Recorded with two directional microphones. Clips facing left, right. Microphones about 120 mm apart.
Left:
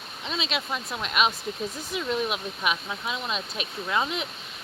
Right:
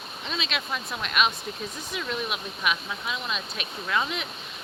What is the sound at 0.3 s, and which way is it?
Speech, 25° left (ahead or behind).